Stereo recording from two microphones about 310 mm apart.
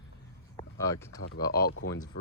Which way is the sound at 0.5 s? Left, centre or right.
Centre.